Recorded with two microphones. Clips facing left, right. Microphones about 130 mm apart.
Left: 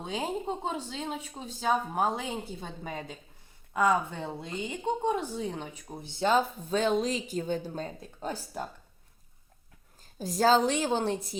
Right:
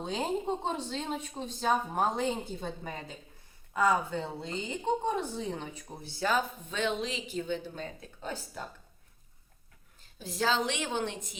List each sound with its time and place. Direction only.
0.0 s speech: 10° left (ahead or behind)
6.1 s speech: 25° left (ahead or behind)
10.2 s speech: 40° left (ahead or behind)